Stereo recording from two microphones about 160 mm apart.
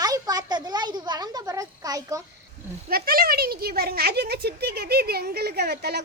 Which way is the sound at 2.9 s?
70° right (ahead or behind).